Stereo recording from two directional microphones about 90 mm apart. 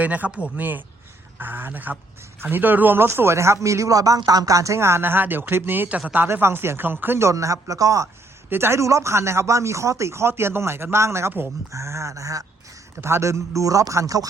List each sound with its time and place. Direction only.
0.0 s speech: 15° right (ahead or behind); by 8.0 s 40° right (ahead or behind)
8.4 s speech: 25° right (ahead or behind)